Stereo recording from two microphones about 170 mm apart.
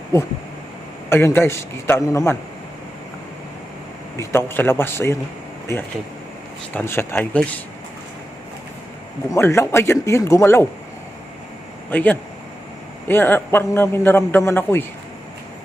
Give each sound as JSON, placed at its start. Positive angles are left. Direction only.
{"t": 0.1, "sound": "a man's voice", "side_deg": 15}
{"t": 4.2, "sound": "a man's voice", "side_deg": 15}
{"t": 6.7, "sound": "a man's voice", "side_deg": 15}
{"t": 9.3, "sound": "a man's voice", "side_deg": 15}
{"t": 11.9, "sound": "a man's voice", "side_deg": 10}